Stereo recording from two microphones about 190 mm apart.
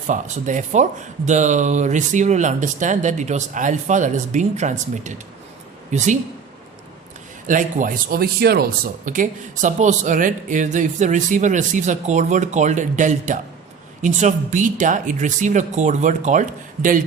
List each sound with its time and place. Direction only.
0.1 s speech: 40° right (ahead or behind)
7.4 s speech: 45° right (ahead or behind)